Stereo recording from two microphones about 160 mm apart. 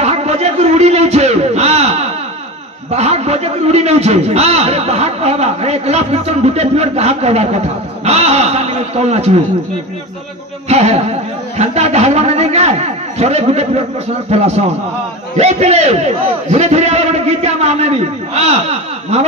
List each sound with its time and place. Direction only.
0.0 s a sound: 40° right (ahead or behind)
2.9 s a man's voice: 40° right (ahead or behind)
10.7 s a man's voice: 40° right (ahead or behind)